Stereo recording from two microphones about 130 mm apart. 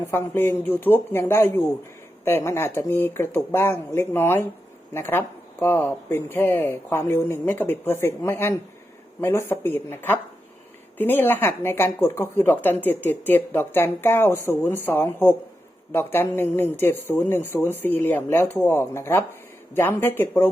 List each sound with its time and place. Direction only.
0.1 s speech: 20° left (ahead or behind)